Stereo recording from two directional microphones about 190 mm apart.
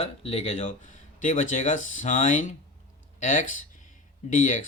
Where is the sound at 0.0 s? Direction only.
30° left (ahead or behind).